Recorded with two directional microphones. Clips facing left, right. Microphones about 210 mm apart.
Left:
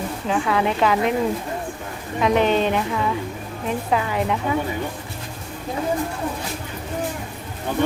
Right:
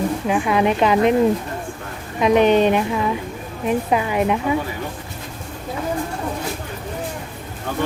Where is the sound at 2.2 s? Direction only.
15° right (ahead or behind).